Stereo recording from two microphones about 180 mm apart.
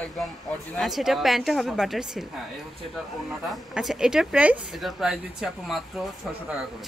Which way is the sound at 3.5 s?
Centre (ahead or behind).